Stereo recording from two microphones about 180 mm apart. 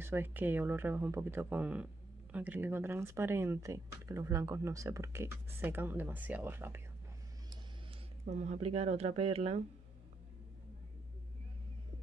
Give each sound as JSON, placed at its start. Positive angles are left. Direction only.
{"t": 0.0, "sound": "speech", "side_deg": -10}
{"t": 8.3, "sound": "speech", "side_deg": -40}